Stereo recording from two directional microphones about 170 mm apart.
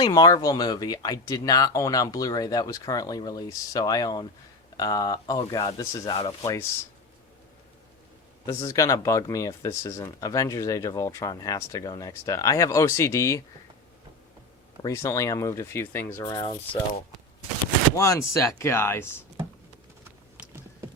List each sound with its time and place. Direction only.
0.0 s speech: 25° left (ahead or behind)
8.4 s speech: 20° left (ahead or behind)
14.8 s speech: 20° left (ahead or behind)
17.9 s speech: 20° left (ahead or behind)